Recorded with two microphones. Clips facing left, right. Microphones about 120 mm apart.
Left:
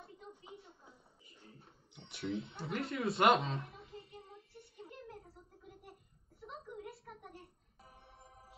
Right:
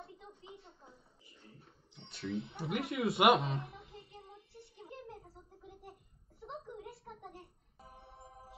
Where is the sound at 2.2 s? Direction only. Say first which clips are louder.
Even; 25° left (ahead or behind).